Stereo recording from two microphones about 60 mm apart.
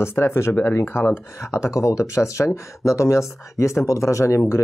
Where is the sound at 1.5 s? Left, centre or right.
Left.